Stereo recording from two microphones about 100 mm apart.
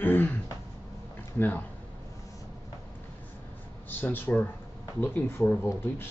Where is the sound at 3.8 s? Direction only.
20° left (ahead or behind).